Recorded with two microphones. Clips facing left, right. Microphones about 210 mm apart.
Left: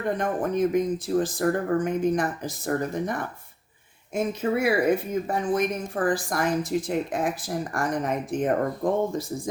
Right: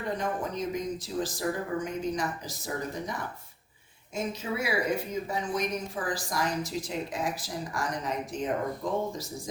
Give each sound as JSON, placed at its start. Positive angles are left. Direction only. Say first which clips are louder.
{"t": 0.2, "sound": "speech", "louder": "left 8 dB", "side_deg": 55}